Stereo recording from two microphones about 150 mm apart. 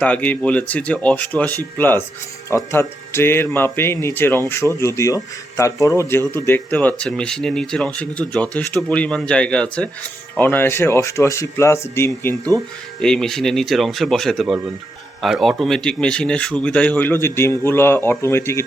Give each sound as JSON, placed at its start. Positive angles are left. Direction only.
{"t": 0.0, "sound": "speech", "side_deg": 10}
{"t": 13.0, "sound": "speech", "side_deg": 5}